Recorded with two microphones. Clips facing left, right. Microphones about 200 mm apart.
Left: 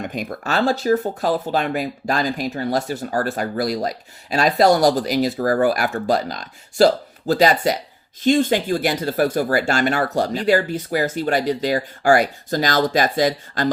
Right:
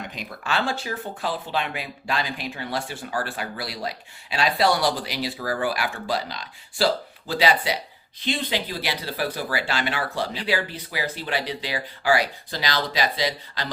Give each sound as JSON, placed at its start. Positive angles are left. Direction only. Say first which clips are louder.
{"t": 0.0, "sound": "speech", "louder": "left 8 dB", "side_deg": 50}